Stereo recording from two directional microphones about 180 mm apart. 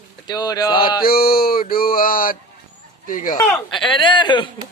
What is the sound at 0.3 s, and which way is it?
Mantra, 25° left (ahead or behind).